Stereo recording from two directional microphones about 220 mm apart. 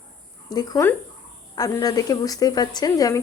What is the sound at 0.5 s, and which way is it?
A woman's voice, 15° left (ahead or behind).